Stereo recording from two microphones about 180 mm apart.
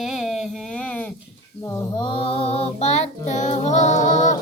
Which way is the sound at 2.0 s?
30° left (ahead or behind).